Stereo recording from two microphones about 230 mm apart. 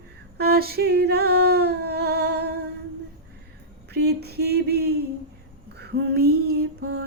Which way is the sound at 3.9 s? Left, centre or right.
Right.